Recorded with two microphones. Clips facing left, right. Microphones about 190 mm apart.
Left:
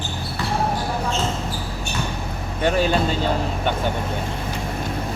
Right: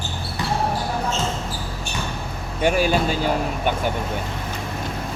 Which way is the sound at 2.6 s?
10° right (ahead or behind).